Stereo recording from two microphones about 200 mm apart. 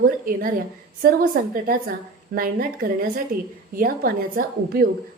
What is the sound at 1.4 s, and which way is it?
A woman's voice, 45° right (ahead or behind).